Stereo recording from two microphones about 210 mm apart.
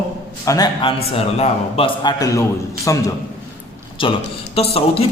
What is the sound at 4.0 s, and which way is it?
A man's voice, 25° left (ahead or behind).